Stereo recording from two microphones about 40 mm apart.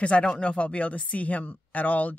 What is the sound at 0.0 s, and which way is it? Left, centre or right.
Speech, left.